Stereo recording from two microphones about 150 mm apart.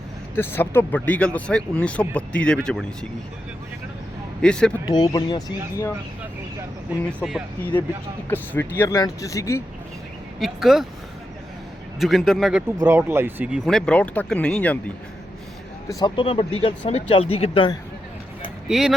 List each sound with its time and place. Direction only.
0.3 s speech: 15° left (ahead or behind)
4.4 s speech: 5° left (ahead or behind)
4.9 s speech: 25° left (ahead or behind)
7.6 s speech: 10° left (ahead or behind)
10.4 s a man's voice: 5° right (ahead or behind)
11.9 s a man's voice: centre (ahead or behind)
12.8 s speech: 15° right (ahead or behind)
13.7 s speech: 5° left (ahead or behind)
15.9 s speech: 25° left (ahead or behind)
18.7 s a man's voice: 5° right (ahead or behind)